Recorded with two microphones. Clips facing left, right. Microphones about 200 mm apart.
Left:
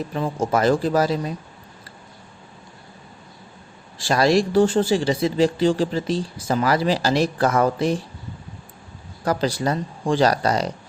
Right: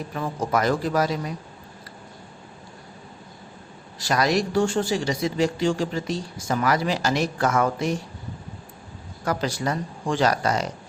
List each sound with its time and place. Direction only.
0.1 s speech: 30° left (ahead or behind)
3.9 s speech: 30° left (ahead or behind)
9.2 s speech: 30° left (ahead or behind)